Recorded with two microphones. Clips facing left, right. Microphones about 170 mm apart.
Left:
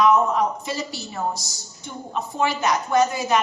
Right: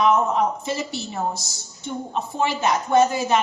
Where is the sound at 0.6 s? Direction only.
25° right (ahead or behind).